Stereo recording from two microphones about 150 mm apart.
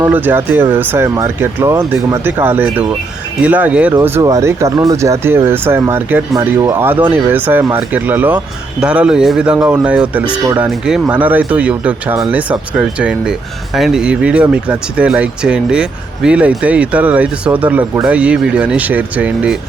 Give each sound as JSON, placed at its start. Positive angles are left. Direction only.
{"t": 0.0, "sound": "speech", "side_deg": -10}